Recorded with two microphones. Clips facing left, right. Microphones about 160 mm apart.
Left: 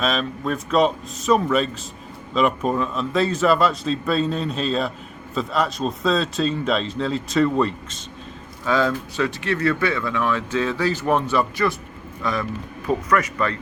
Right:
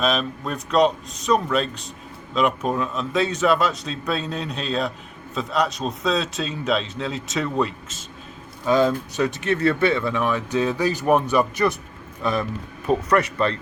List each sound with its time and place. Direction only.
0.0 s a man's voice: centre (ahead or behind)
8.6 s speech: 20° right (ahead or behind)